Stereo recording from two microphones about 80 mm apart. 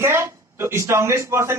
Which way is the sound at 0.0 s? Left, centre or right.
Right.